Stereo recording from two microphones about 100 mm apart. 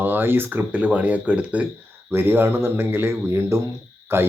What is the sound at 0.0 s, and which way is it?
Speech, 20° right (ahead or behind).